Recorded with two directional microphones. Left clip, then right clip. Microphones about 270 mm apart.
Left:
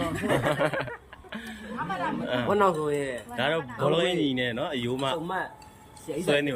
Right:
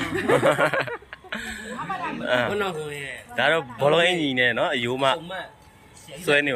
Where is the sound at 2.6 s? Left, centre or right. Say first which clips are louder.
Left 4 dB; centre.